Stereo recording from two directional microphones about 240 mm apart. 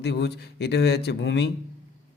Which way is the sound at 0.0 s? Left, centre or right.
Left.